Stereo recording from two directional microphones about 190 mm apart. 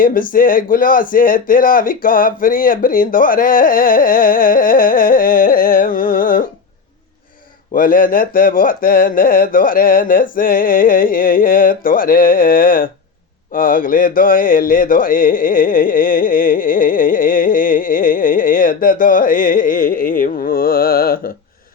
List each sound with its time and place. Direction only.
0.0 s speech: 50° left (ahead or behind)
7.7 s speech: 50° left (ahead or behind)